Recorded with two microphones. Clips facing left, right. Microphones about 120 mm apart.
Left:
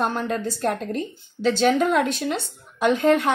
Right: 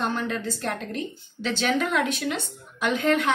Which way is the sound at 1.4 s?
40° left (ahead or behind).